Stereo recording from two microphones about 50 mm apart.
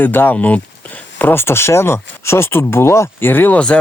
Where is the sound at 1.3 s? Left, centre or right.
Left.